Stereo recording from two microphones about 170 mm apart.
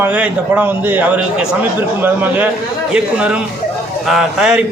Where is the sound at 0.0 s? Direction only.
10° right (ahead or behind).